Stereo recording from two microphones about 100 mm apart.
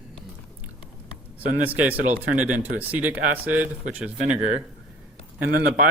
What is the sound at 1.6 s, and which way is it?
Speech, 15° right (ahead or behind).